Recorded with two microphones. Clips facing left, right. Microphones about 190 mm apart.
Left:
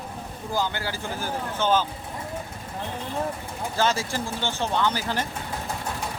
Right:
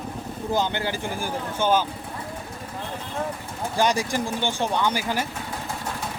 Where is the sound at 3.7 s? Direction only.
15° right (ahead or behind).